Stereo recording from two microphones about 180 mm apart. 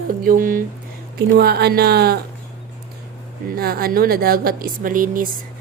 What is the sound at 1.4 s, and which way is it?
Speech, 60° right (ahead or behind).